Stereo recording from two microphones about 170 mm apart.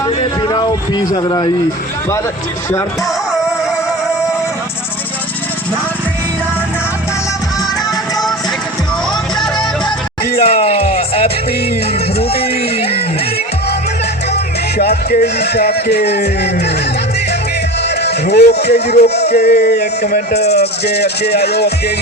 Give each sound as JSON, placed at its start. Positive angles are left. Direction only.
{"t": 0.2, "sound": "speech", "side_deg": 25}
{"t": 10.3, "sound": "speech", "side_deg": 35}
{"t": 12.2, "sound": "music", "side_deg": 35}
{"t": 15.2, "sound": "music", "side_deg": 75}
{"t": 17.8, "sound": "speech", "side_deg": 75}
{"t": 19.0, "sound": "music", "side_deg": 75}
{"t": 20.3, "sound": "speech", "side_deg": 40}
{"t": 20.6, "sound": "music", "side_deg": 75}